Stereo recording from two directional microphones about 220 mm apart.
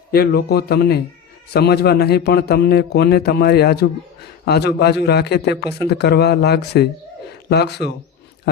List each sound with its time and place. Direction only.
0.1 s a man's voice: 45° left (ahead or behind)